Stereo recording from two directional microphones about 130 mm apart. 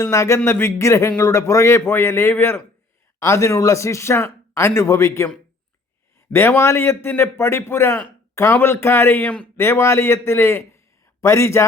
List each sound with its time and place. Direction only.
0.0 s a man's voice: 20° left (ahead or behind)
6.3 s a man's voice: 20° left (ahead or behind)